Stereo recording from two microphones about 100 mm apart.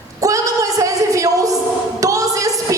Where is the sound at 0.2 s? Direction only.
35° right (ahead or behind).